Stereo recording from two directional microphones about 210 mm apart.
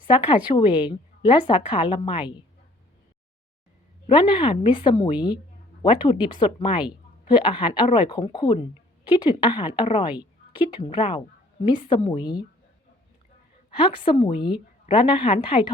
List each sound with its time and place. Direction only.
0.1 s a woman's voice: 25° left (ahead or behind)
4.1 s a woman's voice: 25° left (ahead or behind)
13.7 s a woman's voice: 25° left (ahead or behind)